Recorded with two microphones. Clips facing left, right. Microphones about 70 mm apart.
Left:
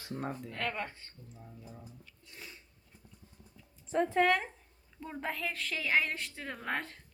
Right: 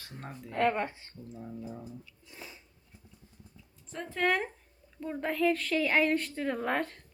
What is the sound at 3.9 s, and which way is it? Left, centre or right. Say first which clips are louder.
Speech: left 10 dB; left.